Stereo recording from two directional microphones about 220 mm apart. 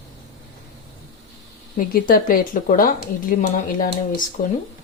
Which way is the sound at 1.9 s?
40° left (ahead or behind).